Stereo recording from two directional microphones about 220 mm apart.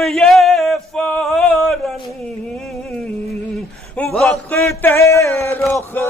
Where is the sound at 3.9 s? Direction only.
5° left (ahead or behind).